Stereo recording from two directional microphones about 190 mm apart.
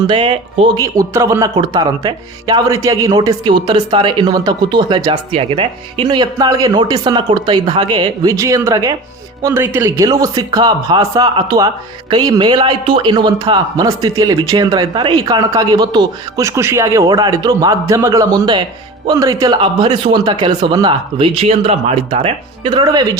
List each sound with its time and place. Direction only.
0.1 s a man's voice: 25° right (ahead or behind)